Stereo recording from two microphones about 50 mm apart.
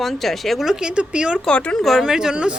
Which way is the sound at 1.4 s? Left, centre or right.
Centre.